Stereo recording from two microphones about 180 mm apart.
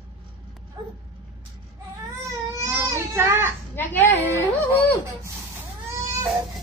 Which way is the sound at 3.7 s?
10° left (ahead or behind).